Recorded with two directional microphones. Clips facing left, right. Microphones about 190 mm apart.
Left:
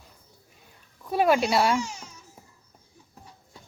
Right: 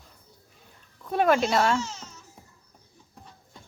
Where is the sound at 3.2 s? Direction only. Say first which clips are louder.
Even; 5° left (ahead or behind).